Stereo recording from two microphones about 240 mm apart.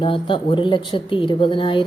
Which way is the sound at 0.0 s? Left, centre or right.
Left.